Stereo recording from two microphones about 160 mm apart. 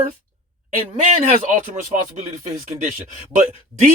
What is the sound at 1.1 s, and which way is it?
Speech, 50° right (ahead or behind).